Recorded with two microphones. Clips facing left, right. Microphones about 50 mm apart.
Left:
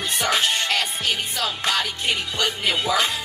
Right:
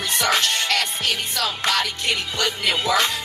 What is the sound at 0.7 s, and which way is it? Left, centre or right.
Music, right.